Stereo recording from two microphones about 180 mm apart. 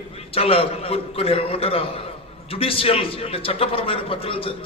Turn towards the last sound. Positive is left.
turn(degrees=30)  # may be behind; listen again after turning